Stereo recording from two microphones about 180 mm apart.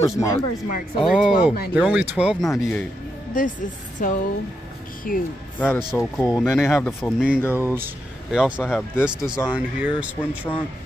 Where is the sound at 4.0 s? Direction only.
45° left (ahead or behind).